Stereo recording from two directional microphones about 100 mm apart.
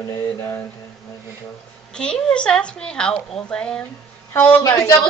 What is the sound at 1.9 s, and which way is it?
Speech, 10° left (ahead or behind).